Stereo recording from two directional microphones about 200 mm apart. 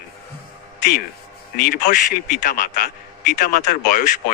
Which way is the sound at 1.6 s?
45° left (ahead or behind).